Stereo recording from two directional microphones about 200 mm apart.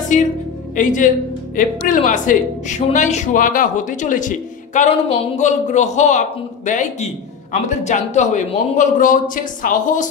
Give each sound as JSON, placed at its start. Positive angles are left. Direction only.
{"t": 0.1, "sound": "speech", "side_deg": 40}